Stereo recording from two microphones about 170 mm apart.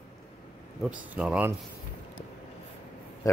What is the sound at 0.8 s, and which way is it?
Speech, 5° right (ahead or behind).